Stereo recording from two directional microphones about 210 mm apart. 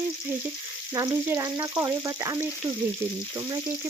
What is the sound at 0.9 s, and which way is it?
Frying, 15° right (ahead or behind).